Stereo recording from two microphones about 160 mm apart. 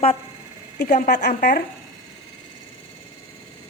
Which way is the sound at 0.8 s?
50° left (ahead or behind).